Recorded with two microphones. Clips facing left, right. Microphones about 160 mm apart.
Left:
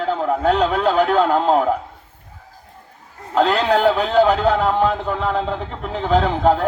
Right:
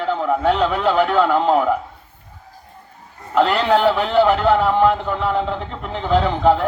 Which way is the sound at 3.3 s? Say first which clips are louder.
Even; 40° left (ahead or behind).